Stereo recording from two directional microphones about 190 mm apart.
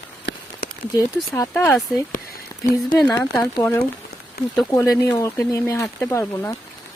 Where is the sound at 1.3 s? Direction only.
15° left (ahead or behind).